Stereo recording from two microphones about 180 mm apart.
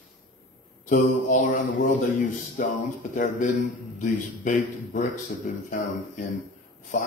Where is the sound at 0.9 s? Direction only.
45° left (ahead or behind).